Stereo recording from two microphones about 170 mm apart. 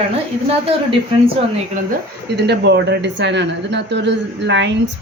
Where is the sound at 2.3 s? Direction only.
80° right.